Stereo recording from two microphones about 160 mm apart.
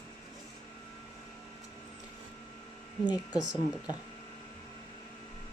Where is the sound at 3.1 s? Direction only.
25° left (ahead or behind).